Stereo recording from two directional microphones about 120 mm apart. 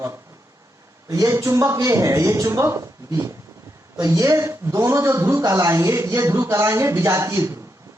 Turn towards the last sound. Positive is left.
turn(degrees=-25)  # may be behind; listen again after turning